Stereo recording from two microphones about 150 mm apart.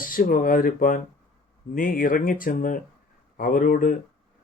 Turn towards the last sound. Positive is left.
turn(degrees=70)  # may be behind; listen again after turning